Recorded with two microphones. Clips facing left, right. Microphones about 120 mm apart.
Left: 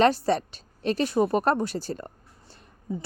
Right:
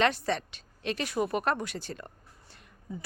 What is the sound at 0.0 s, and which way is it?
A woman's voice, 35° left (ahead or behind).